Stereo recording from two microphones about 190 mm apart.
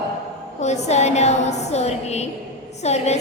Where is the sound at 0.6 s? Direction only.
35° left (ahead or behind).